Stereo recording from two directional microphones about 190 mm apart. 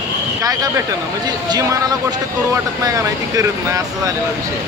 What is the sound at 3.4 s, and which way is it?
Speech, 20° right (ahead or behind).